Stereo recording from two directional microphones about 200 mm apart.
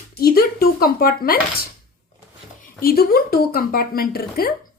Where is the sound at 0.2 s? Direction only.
50° left (ahead or behind).